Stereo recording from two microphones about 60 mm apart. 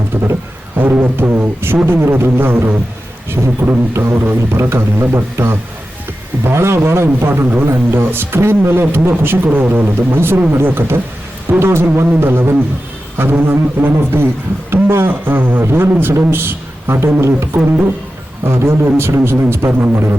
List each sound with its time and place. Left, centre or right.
0.1 s music: right
1.9 s a man's voice: right
4.4 s a man's voice: right